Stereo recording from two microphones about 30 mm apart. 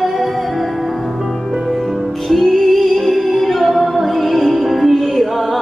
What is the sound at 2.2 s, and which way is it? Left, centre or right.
Music, centre.